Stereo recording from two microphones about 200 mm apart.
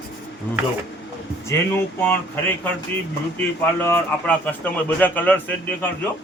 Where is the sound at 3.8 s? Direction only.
10° left (ahead or behind).